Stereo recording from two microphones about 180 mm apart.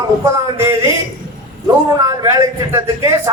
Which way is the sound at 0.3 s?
15° right (ahead or behind).